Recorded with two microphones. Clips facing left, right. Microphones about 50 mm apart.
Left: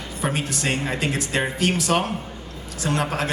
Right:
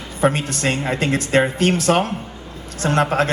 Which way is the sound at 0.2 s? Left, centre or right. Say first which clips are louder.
Right 7 dB; right.